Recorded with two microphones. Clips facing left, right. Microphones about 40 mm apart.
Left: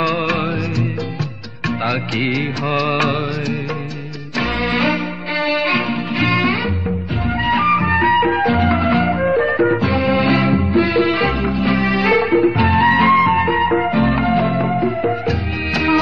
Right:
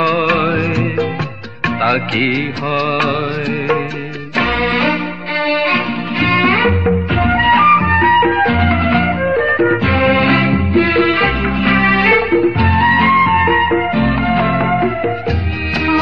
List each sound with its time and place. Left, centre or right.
0.0 s music: centre
0.3 s music: right
2.2 s music: centre
4.6 s music: centre
7.2 s music: right
7.5 s music: centre
8.4 s music: right
9.2 s music: centre
9.8 s music: right
11.6 s music: right
12.4 s music: centre
14.4 s music: right